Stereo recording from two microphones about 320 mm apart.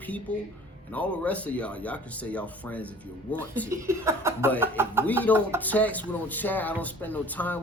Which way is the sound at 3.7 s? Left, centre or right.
Centre.